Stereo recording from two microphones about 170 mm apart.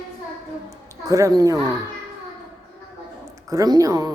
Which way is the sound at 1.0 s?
20° right (ahead or behind).